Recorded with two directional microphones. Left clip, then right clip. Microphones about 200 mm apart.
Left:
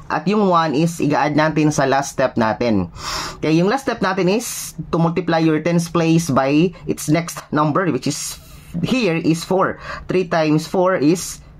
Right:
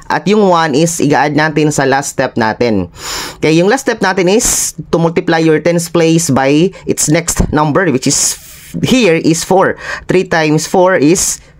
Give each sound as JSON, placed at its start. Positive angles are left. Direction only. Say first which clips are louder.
{"t": 0.1, "sound": "speech", "louder": "right 7 dB", "side_deg": -35}
{"t": 3.4, "sound": "speech", "louder": "right 8 dB", "side_deg": -40}